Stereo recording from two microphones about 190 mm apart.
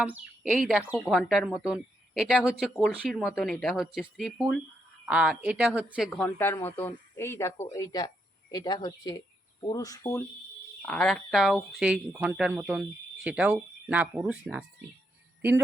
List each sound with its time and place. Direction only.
0.0 s speech: 5° right (ahead or behind)
6.1 s speech: 10° left (ahead or behind)
10.8 s speech: 5° left (ahead or behind)